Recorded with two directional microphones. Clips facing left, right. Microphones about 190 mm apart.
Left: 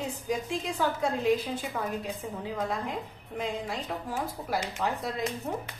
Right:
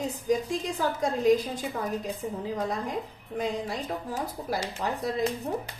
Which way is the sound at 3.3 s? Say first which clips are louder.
Right 3 dB; 40° right (ahead or behind).